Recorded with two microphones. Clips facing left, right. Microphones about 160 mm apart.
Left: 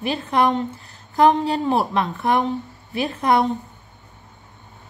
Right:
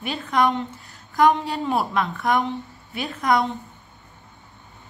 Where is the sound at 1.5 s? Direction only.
35° left (ahead or behind).